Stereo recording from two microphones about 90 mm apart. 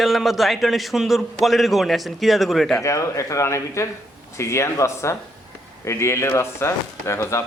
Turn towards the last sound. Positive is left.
turn(degrees=30)  # may be behind; listen again after turning